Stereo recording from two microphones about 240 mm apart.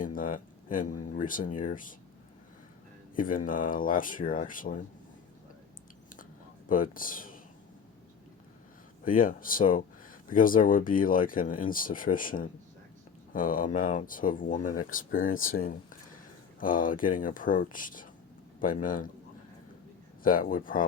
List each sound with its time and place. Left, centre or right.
0.0 s a sound: left
1.0 s speech: left
3.2 s speech: left
6.7 s speech: left
9.0 s speech: left
20.2 s speech: left